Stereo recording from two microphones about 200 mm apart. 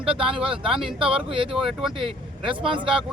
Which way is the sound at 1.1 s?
25° right (ahead or behind).